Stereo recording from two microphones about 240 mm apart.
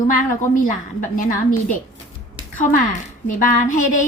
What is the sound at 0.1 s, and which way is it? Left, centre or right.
A woman's voice, left.